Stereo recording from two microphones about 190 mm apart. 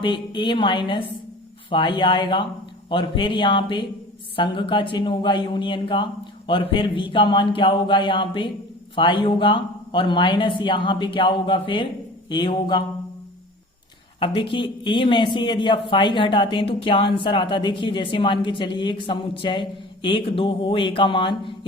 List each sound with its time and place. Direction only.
0.0 s speech: 25° left (ahead or behind)
14.2 s speech: 25° left (ahead or behind)